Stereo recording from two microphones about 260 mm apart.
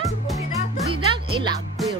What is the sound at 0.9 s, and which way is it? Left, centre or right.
Music, centre.